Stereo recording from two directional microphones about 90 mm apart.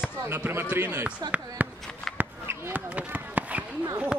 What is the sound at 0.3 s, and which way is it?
A man's voice, 25° right (ahead or behind).